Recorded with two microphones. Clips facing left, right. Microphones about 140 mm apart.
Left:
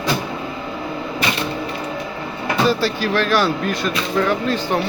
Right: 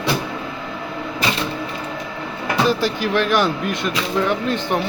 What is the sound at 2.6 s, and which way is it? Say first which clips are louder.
Speech: left 1 dB; 15° right (ahead or behind).